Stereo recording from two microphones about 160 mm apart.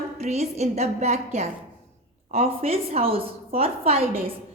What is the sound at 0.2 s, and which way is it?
A woman's voice, 40° right (ahead or behind).